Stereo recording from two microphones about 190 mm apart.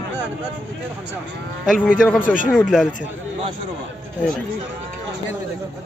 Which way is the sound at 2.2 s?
45° left (ahead or behind).